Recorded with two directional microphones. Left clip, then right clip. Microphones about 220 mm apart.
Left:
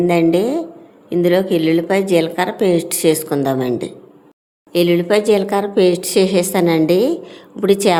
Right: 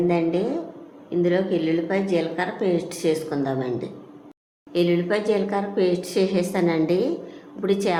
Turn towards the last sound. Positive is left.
turn(degrees=40)  # may be behind; listen again after turning